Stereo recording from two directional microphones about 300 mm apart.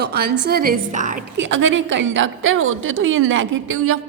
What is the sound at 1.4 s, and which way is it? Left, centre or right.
A woman's voice, right.